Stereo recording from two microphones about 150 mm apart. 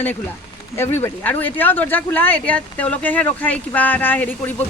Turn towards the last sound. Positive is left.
turn(degrees=10)  # may be behind; listen again after turning